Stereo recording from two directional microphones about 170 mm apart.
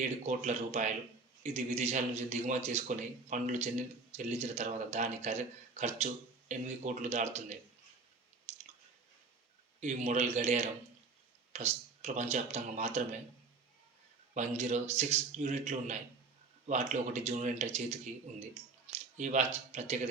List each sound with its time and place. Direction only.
0.0 s a man's voice: 45° right (ahead or behind)
8.5 s chewing: 40° right (ahead or behind)
9.8 s a man's voice: 45° right (ahead or behind)
14.3 s a man's voice: 40° right (ahead or behind)
18.9 s a sound: 45° right (ahead or behind)
19.7 s a man's voice: 40° right (ahead or behind)